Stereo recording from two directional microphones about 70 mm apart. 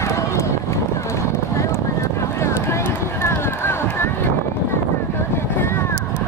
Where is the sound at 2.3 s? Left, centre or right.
Left.